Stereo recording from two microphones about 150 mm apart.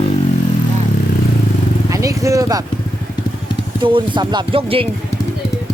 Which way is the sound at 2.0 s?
20° right (ahead or behind).